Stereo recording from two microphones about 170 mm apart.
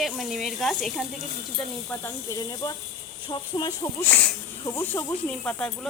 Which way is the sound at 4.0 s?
10° left (ahead or behind).